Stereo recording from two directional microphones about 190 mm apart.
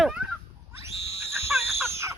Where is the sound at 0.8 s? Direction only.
15° right (ahead or behind).